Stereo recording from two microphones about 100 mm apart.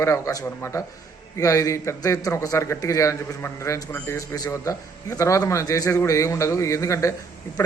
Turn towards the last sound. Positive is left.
turn(degrees=30)  # may be behind; listen again after turning